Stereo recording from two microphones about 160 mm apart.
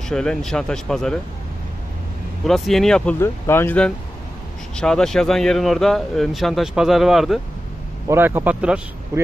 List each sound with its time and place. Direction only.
0.1 s speech: 5° left (ahead or behind)
2.4 s speech: centre (ahead or behind)
3.2 s speech: 15° left (ahead or behind); by 7.3 s centre (ahead or behind)
8.1 s speech: 15° right (ahead or behind)
9.1 s speech: 20° right (ahead or behind)